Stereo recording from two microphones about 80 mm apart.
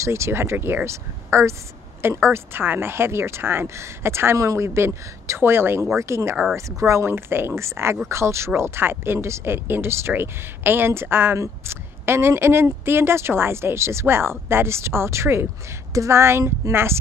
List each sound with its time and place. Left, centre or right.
0.0 s speech: right